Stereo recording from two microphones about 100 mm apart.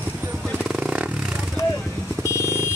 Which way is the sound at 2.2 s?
30° left (ahead or behind).